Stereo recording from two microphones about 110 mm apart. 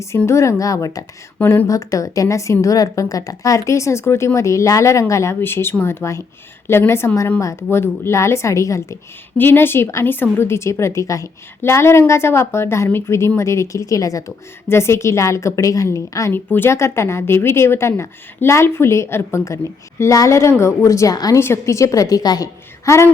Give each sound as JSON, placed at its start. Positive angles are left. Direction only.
{"t": 0.3, "sound": "a woman's voice", "side_deg": 25}
{"t": 1.4, "sound": "a woman's voice", "side_deg": 20}